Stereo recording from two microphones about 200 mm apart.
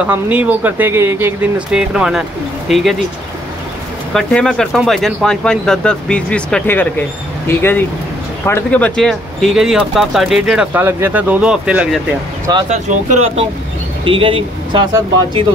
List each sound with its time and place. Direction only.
0.0 s speech: 5° right (ahead or behind)
4.1 s speech: 5° left (ahead or behind)
12.6 s speech: 35° right (ahead or behind)
14.0 s speech: 25° right (ahead or behind)